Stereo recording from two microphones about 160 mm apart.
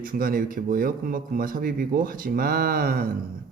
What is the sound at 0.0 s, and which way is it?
Speech, 60° right (ahead or behind).